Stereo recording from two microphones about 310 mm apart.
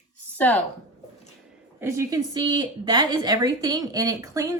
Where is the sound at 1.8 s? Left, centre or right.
Centre.